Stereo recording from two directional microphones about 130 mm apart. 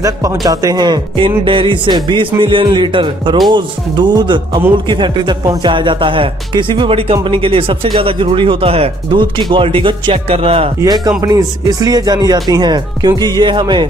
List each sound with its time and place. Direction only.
0.5 s speech: 30° right (ahead or behind); by 10.7 s 50° right (ahead or behind)
10.8 s speech: 30° right (ahead or behind)